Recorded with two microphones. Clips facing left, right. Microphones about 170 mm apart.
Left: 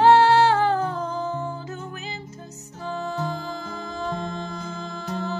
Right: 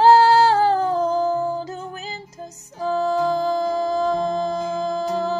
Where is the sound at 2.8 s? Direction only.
40° right (ahead or behind).